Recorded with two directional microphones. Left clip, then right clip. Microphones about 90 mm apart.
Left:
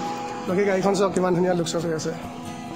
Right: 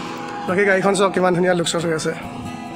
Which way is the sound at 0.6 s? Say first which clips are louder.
Right 5 dB; 10° right (ahead or behind).